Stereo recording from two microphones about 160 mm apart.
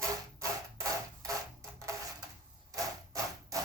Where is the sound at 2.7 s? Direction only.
20° right (ahead or behind).